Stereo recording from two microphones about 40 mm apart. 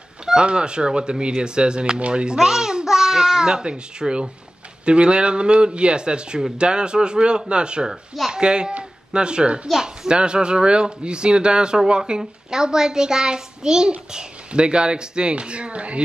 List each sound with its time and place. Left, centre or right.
0.2 s a child's voice: centre
2.3 s a child's voice: centre
4.8 s a child's voice: right